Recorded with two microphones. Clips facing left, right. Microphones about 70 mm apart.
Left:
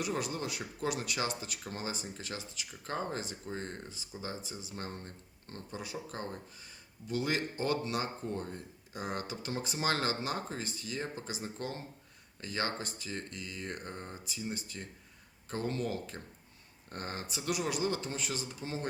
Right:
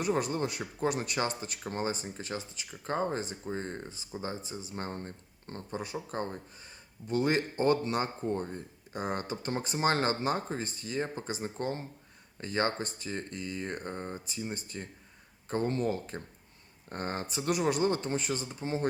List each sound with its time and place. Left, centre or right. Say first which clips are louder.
0.0 s speech: right 5 dB; right